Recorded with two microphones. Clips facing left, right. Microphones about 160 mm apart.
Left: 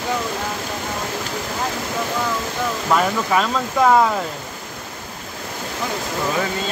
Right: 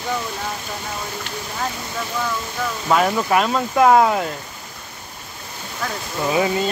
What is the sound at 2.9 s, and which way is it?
Speech, 10° right (ahead or behind).